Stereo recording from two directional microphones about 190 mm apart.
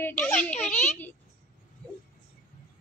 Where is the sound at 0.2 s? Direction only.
10° left (ahead or behind).